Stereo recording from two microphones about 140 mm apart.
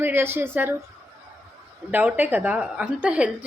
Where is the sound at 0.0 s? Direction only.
15° right (ahead or behind).